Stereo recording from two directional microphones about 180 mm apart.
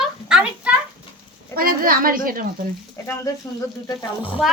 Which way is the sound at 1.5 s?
55° right (ahead or behind).